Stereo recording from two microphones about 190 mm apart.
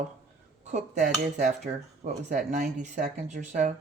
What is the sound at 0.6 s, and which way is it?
Speech, 40° right (ahead or behind).